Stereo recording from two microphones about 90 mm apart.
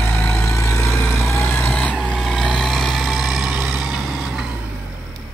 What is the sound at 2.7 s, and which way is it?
Vehicle, centre (ahead or behind).